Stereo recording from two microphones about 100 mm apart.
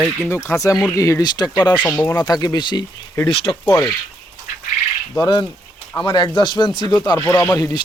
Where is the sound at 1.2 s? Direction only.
45° left (ahead or behind).